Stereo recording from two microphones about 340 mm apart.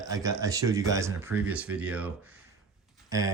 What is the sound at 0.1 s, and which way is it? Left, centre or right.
Speech, centre.